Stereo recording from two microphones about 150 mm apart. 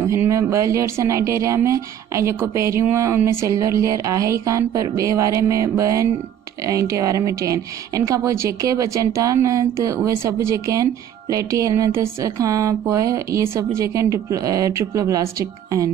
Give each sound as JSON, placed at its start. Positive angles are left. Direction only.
{"t": 0.0, "sound": "speech", "side_deg": -20}